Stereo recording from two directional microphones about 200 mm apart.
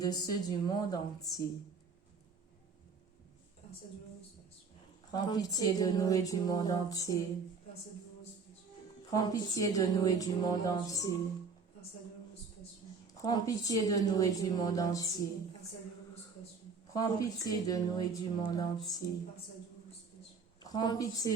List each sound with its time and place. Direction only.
0.0 s a woman's voice: 20° left (ahead or behind)
5.1 s a woman's voice: 20° left (ahead or behind)
9.0 s a woman's voice: 20° left (ahead or behind)
13.2 s a woman's voice: 15° left (ahead or behind)
16.9 s a woman's voice: 20° left (ahead or behind)
20.6 s a woman's voice: 20° left (ahead or behind)